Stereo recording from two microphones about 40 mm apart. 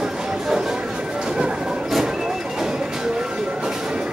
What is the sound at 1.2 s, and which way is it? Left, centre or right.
Music, centre.